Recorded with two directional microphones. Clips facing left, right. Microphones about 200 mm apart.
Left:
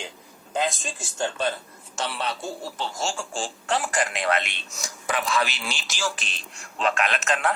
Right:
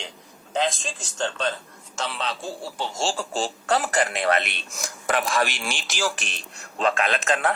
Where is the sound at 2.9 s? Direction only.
30° right (ahead or behind).